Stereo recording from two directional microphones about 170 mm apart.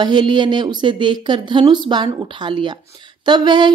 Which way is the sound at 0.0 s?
25° right (ahead or behind).